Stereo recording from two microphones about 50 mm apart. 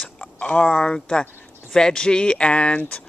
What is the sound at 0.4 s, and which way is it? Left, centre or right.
Speech, left.